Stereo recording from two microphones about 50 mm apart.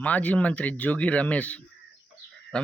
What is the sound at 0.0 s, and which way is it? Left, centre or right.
Speech, left.